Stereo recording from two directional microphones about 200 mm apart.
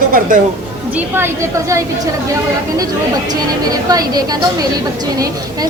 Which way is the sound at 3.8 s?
20° right (ahead or behind).